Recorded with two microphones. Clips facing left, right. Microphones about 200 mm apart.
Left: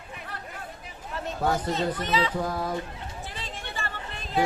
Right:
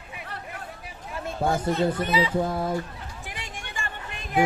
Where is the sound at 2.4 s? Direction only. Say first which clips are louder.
Right 4 dB; 25° right (ahead or behind).